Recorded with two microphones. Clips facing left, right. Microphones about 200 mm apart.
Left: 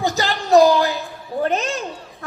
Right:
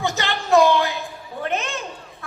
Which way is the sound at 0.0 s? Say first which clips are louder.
Left 3 dB; 35° left (ahead or behind).